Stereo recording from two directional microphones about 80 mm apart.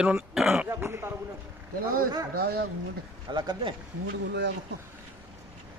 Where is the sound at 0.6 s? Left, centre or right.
Right.